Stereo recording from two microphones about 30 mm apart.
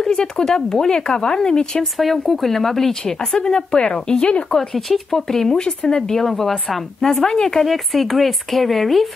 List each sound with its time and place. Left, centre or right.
0.0 s speech: left
2.0 s speech: centre
3.4 s speech: left
4.6 s speech: centre
5.3 s speech: centre
7.6 s speech: centre